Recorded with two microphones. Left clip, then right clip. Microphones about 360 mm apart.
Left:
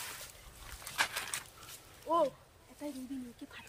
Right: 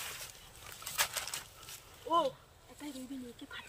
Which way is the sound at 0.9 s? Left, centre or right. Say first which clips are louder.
Left 1 dB; right.